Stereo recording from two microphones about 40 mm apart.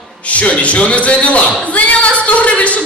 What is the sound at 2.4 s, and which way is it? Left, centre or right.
Speech, left.